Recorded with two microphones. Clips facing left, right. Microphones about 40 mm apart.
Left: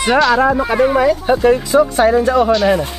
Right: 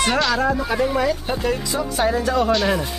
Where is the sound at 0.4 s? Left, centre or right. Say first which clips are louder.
Left 7 dB; left.